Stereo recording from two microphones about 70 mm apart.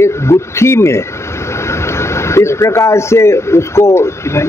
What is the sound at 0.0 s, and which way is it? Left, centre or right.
A man's voice, left.